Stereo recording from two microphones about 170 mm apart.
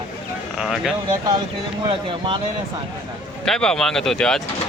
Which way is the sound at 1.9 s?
30° right (ahead or behind).